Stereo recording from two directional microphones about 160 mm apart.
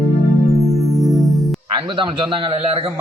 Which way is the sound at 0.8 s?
Centre (ahead or behind).